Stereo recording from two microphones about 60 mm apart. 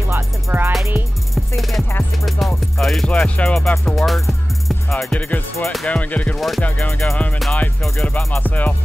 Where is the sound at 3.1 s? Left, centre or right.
Left.